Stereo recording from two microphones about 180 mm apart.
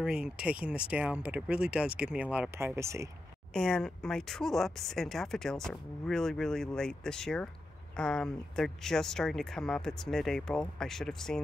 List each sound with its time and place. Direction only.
0.0 s speech: 5° right (ahead or behind)
3.5 s speech: 5° left (ahead or behind)